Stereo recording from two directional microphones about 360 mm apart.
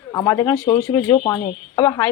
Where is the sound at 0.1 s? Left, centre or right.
Centre.